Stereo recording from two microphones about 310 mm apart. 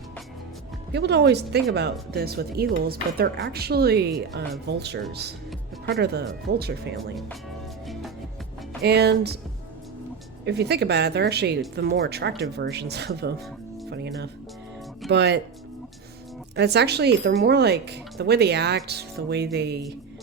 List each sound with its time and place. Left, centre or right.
0.9 s speech: right
6.9 s speech: centre
8.8 s speech: right
10.4 s speech: right
16.6 s speech: right